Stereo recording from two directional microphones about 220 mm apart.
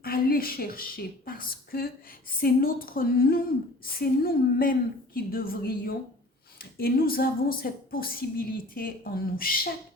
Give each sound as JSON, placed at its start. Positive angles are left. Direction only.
{"t": 0.0, "sound": "a woman's voice", "side_deg": 40}